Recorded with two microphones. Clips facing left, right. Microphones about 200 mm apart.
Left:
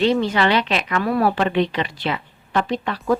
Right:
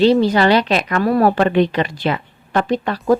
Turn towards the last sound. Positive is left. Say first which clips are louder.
# right 5 dB
turn(degrees=-40)  # may be behind; listen again after turning